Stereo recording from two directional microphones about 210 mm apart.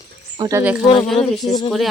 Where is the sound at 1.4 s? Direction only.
25° left (ahead or behind).